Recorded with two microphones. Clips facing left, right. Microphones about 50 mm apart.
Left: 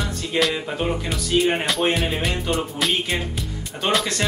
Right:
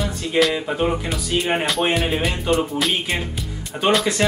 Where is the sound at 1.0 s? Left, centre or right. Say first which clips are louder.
Left 1 dB; centre.